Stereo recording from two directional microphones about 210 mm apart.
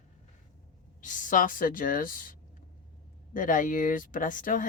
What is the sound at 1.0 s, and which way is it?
Speech, 40° left (ahead or behind).